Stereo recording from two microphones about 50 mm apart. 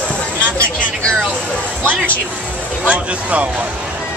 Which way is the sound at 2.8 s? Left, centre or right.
Right.